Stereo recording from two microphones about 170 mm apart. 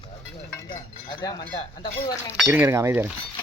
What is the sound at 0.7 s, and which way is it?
Chink, 25° left (ahead or behind).